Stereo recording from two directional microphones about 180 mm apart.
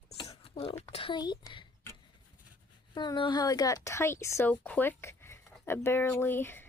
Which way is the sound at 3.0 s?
25° left (ahead or behind).